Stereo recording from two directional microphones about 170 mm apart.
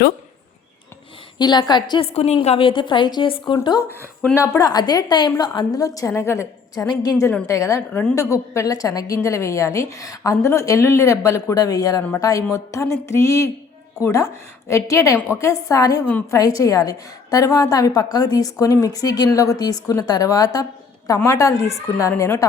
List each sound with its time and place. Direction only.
1.4 s a woman's voice: 25° left (ahead or behind)
2.1 s a woman's voice: 40° left (ahead or behind); by 22.4 s 15° left (ahead or behind)